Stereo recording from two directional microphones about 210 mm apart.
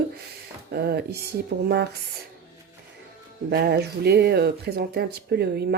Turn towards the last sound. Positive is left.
turn(degrees=-50)  # may be behind; listen again after turning